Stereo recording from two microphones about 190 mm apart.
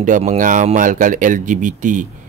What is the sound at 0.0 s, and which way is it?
Speech, 40° right (ahead or behind).